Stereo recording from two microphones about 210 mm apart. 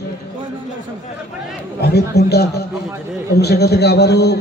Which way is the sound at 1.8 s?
50° left (ahead or behind).